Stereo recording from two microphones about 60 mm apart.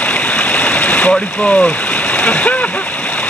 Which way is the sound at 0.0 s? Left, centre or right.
Left.